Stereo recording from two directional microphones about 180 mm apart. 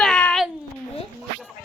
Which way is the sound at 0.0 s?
5° left (ahead or behind).